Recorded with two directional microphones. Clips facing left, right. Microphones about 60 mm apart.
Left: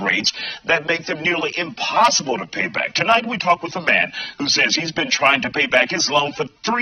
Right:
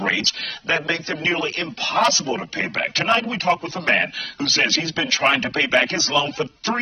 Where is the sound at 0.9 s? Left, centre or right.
Left.